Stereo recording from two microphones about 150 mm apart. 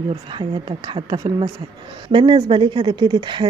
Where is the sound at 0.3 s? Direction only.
30° right (ahead or behind).